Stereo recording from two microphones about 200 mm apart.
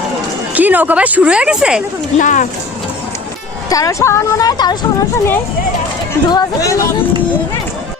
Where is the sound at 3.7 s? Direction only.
15° left (ahead or behind).